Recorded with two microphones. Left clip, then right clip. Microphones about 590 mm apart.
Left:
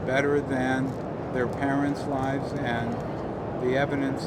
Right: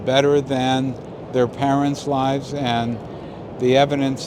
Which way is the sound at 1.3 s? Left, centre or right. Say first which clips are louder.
Right 9 dB; right.